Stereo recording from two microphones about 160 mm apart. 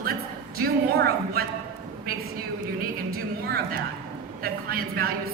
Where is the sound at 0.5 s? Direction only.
75° right (ahead or behind).